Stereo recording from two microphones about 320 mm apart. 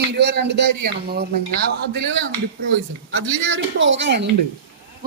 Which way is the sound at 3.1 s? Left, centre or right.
Right.